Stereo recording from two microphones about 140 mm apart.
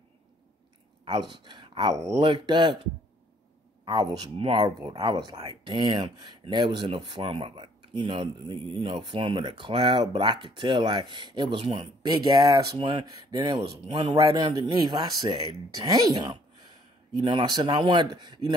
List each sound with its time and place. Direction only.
1.3 s speech: 35° right (ahead or behind)
3.8 s speech: 30° right (ahead or behind)
4.4 s speech: 40° right (ahead or behind)
12.7 s speech: 40° right (ahead or behind)
13.0 s speech: 25° right (ahead or behind)
13.6 s speech: 45° right (ahead or behind)
14.1 s speech: 25° right (ahead or behind)